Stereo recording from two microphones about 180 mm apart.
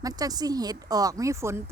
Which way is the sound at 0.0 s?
20° right (ahead or behind).